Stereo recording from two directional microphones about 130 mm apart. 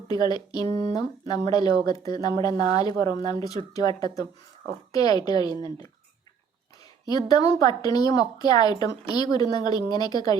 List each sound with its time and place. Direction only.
0.1 s a woman's voice: 30° left (ahead or behind)
7.0 s a woman's voice: 30° left (ahead or behind)